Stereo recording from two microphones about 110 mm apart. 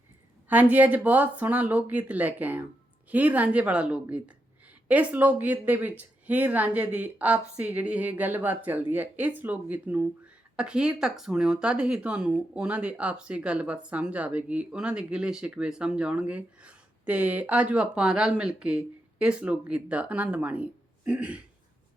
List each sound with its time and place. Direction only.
0.4 s speech: 15° right (ahead or behind)